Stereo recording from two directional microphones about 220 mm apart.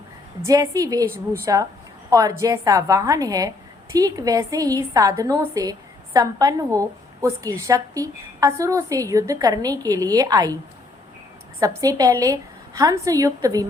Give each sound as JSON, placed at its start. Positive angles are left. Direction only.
{"t": 0.4, "sound": "a woman's voice", "side_deg": -15}
{"t": 11.6, "sound": "a woman's voice", "side_deg": -15}